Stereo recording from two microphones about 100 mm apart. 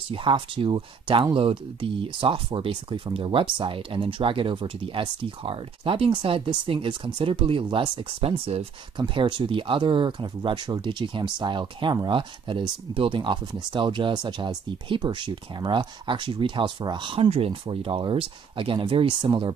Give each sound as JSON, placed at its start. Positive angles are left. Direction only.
{"t": 0.1, "sound": "speech", "side_deg": -60}
{"t": 8.9, "sound": "speech", "side_deg": -50}